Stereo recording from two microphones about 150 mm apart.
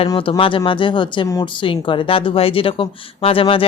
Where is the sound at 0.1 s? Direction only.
35° left (ahead or behind).